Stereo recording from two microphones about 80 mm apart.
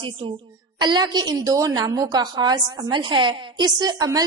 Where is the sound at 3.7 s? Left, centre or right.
Right.